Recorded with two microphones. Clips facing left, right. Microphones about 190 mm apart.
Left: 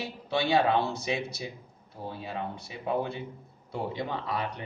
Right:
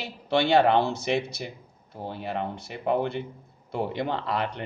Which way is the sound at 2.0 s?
65° right (ahead or behind).